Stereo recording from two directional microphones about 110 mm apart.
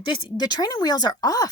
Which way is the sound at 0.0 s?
40° left (ahead or behind).